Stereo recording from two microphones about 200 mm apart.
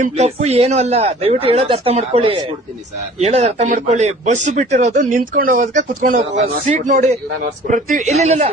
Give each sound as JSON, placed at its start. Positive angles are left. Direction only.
{"t": 0.0, "sound": "speech", "side_deg": -35}